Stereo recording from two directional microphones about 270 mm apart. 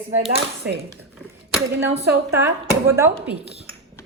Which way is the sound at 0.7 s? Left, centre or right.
Right.